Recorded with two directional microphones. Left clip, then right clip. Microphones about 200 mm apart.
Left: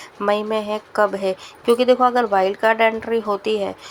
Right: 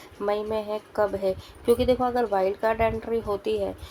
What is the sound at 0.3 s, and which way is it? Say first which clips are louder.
A woman's voice: left 7 dB; 15° left (ahead or behind).